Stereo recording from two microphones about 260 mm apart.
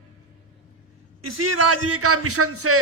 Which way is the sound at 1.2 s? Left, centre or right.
Right.